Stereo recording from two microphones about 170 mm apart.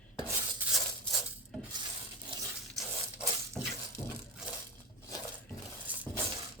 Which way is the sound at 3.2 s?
5° right (ahead or behind).